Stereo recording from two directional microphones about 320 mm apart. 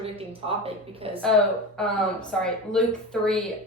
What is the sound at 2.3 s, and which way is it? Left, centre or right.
A woman's voice, centre.